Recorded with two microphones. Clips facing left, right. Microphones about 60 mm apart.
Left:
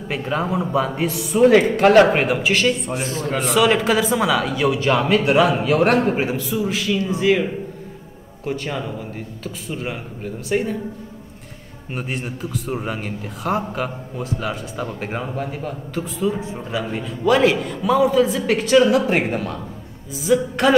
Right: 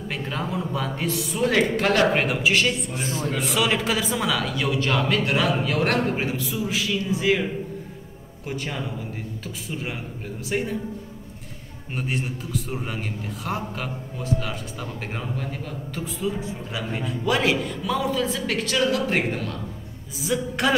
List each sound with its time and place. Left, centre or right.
0.1 s a man's voice: centre
2.2 s a man's voice: centre
8.5 s a man's voice: centre
11.9 s a man's voice: centre
15.0 s a man's voice: left
15.9 s a man's voice: centre
17.8 s a man's voice: centre
20.2 s a man's voice: centre